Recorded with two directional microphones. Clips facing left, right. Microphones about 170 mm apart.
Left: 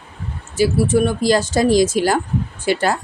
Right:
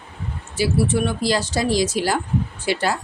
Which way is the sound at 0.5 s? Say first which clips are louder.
Left 4 dB; 45° left (ahead or behind).